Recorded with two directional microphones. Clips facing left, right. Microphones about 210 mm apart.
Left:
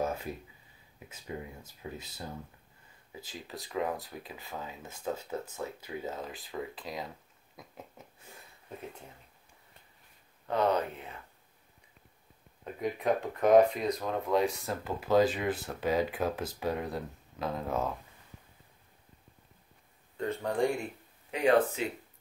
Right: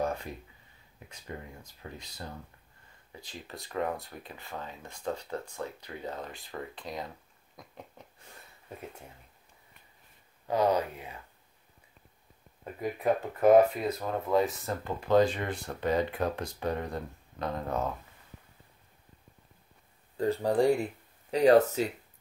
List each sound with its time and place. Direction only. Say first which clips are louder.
0.0 s a sound: right 1 dB; 5° left (ahead or behind)
0.9 s speech: left 2 dB; 10° left (ahead or behind)
10.5 s speech: right 2 dB; 10° right (ahead or behind)
12.6 s speech: right 1 dB; 5° right (ahead or behind)
20.2 s speech: right 4 dB; 35° right (ahead or behind)